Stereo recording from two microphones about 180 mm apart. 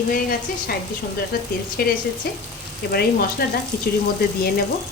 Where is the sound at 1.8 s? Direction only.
55° left (ahead or behind).